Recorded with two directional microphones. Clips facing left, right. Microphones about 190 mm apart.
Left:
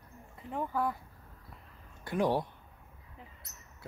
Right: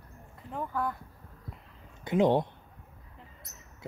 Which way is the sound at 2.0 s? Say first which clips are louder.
Right 5 dB; 20° right (ahead or behind).